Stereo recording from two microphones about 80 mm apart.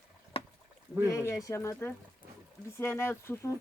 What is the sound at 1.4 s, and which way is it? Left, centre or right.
Speech, left.